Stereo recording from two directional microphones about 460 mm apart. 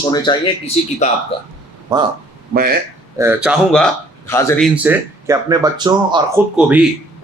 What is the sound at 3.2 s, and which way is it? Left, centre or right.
Speech, centre.